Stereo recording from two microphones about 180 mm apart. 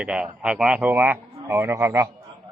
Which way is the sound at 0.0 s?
5° right (ahead or behind).